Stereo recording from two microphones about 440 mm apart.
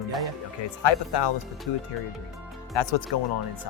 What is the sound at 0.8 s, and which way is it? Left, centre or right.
Speech, left.